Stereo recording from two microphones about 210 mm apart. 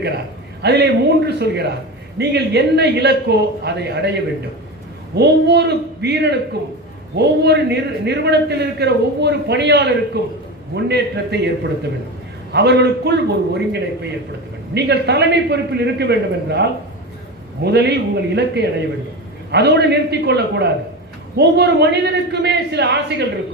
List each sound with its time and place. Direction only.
0.6 s a man's voice: 55° right (ahead or behind)